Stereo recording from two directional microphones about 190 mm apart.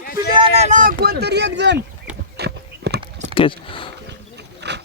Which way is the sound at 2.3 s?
60° right (ahead or behind).